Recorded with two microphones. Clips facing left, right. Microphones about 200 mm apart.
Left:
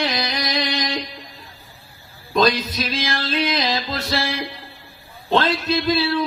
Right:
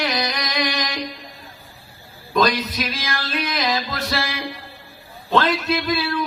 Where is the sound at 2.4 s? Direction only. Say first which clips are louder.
Left 1 dB; 25° left (ahead or behind).